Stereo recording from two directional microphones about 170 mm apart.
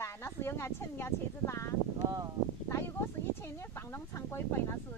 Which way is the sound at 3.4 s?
15° left (ahead or behind).